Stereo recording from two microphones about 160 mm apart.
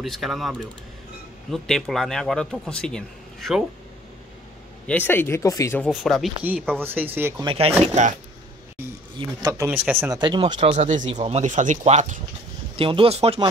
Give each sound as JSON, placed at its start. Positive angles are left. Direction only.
{"t": 0.0, "sound": "speech", "side_deg": 0}
{"t": 4.8, "sound": "speech", "side_deg": 10}
{"t": 5.9, "sound": "speech", "side_deg": 0}
{"t": 6.4, "sound": "speech", "side_deg": -10}
{"t": 7.4, "sound": "speech", "side_deg": -35}
{"t": 9.2, "sound": "speech", "side_deg": -20}
{"t": 10.1, "sound": "speech", "side_deg": -30}
{"t": 12.7, "sound": "speech", "side_deg": -35}